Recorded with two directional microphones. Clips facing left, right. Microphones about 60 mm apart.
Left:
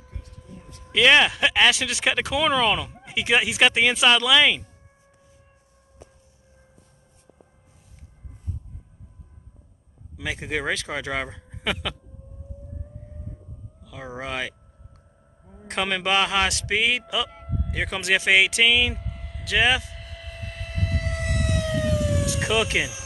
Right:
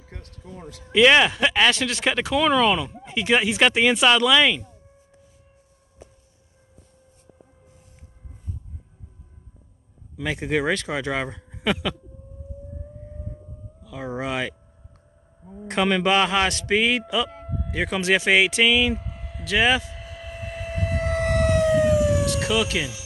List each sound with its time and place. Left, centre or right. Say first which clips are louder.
0.1 s speech: right 4 dB; right
0.9 s speech: right 2 dB; centre
10.1 s speech: right 4 dB; centre
13.7 s speech: right 5 dB; centre
15.6 s a sound: right 5 dB; centre
22.2 s howl: right 1 dB; centre